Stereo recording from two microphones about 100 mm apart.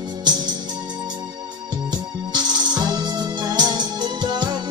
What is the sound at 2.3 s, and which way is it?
Music, 45° right (ahead or behind).